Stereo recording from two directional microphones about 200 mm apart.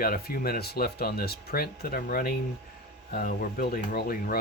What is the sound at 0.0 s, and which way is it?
Speech, 45° left (ahead or behind).